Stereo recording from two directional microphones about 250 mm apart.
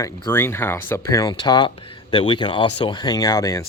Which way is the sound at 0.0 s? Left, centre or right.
Centre.